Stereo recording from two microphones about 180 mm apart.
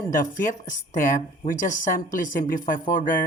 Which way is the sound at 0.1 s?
45° left (ahead or behind).